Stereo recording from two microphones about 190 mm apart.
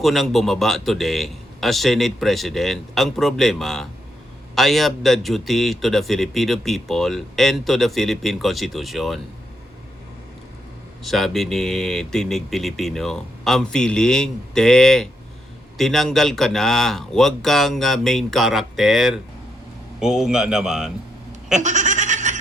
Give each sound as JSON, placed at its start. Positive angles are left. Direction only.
{"t": 0.0, "sound": "a man's voice", "side_deg": 0}
{"t": 11.0, "sound": "a man's voice", "side_deg": 0}
{"t": 21.6, "sound": "laughter", "side_deg": -40}